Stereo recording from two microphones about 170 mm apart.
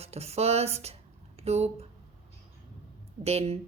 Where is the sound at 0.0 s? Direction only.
35° right (ahead or behind).